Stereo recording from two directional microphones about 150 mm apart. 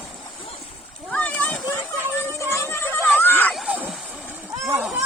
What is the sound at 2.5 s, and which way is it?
Music, 20° left (ahead or behind).